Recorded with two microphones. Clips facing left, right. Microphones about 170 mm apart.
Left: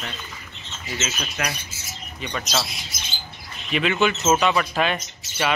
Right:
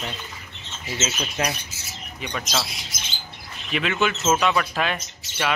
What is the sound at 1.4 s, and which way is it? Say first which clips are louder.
Speech: right 3 dB; 25° right (ahead or behind).